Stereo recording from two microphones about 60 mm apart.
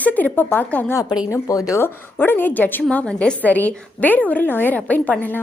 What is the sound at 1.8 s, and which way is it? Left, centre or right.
A woman's voice, left.